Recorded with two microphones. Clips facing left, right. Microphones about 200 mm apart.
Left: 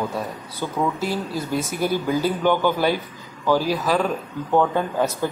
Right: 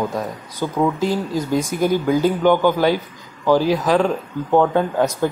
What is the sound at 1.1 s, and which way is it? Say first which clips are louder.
Speech: right 5 dB; 15° right (ahead or behind).